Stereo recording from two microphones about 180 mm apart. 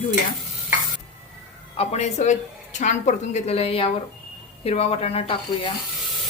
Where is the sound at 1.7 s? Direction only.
35° left (ahead or behind).